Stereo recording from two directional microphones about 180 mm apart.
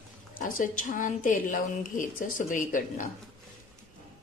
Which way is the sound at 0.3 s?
50° left (ahead or behind).